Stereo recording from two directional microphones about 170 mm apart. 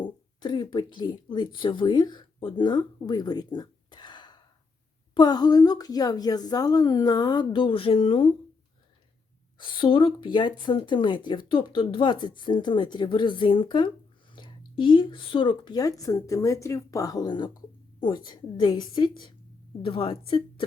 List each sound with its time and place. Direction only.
0.0 s speech: 25° left (ahead or behind)
9.6 s speech: 30° left (ahead or behind)